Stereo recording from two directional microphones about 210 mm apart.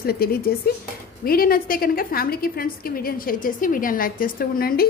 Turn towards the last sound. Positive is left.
turn(degrees=45)  # may be behind; listen again after turning